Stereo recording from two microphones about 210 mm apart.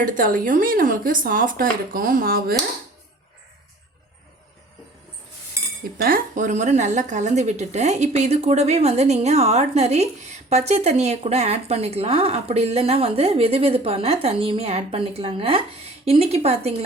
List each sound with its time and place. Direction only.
0.0 s a woman's voice: 40° right (ahead or behind)
5.8 s a woman's voice: 45° right (ahead or behind)